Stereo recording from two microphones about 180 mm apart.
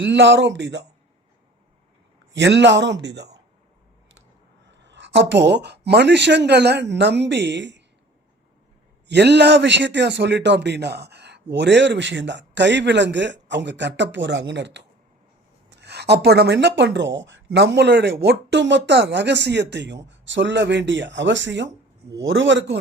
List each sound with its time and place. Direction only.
0.0 s speech: 90° right
2.3 s speech: 80° right
4.7 s speech: 80° right
9.0 s a man's voice: 70° right (ahead or behind)